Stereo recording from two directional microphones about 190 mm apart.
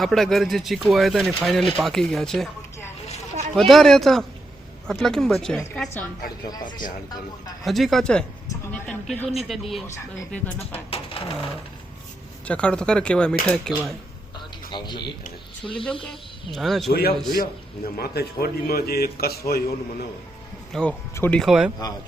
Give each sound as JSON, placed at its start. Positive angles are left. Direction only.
{"t": 0.0, "sound": "speech", "side_deg": 0}
{"t": 6.5, "sound": "speech", "side_deg": 20}
{"t": 7.6, "sound": "speech", "side_deg": 0}
{"t": 9.2, "sound": "speech", "side_deg": 35}
{"t": 9.5, "sound": "speech", "side_deg": 0}
{"t": 9.8, "sound": "speech", "side_deg": 10}
{"t": 10.9, "sound": "coin", "side_deg": 30}
{"t": 12.5, "sound": "speech", "side_deg": 5}
{"t": 14.7, "sound": "speech", "side_deg": 25}
{"t": 15.6, "sound": "speech", "side_deg": 5}
{"t": 16.9, "sound": "a man's voice", "side_deg": 55}
{"t": 20.7, "sound": "speech", "side_deg": 5}